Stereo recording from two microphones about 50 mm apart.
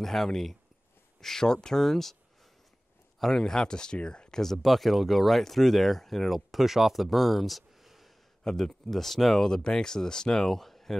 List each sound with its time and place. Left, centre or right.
0.0 s speech: centre
3.2 s speech: centre
8.5 s speech: centre